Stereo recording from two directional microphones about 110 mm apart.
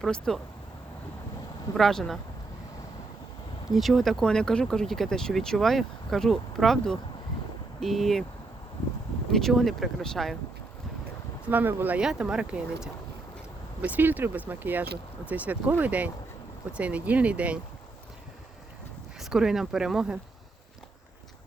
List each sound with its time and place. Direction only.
0.0 s speech: 5° left (ahead or behind)
1.7 s speech: 5° left (ahead or behind)
3.7 s speech: centre (ahead or behind)
9.3 s speech: centre (ahead or behind)
11.4 s speech: 15° right (ahead or behind)
19.2 s speech: 5° right (ahead or behind)